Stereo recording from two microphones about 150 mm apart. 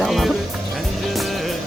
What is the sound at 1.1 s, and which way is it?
Music, centre (ahead or behind).